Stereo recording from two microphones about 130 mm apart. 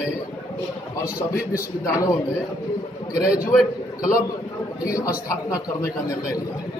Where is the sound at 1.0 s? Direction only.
25° left (ahead or behind).